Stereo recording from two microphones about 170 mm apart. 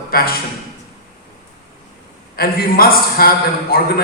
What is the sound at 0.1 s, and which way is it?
Speech, 60° left (ahead or behind).